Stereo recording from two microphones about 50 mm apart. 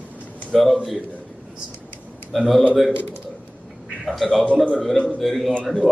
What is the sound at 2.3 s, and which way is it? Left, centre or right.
Speech, centre.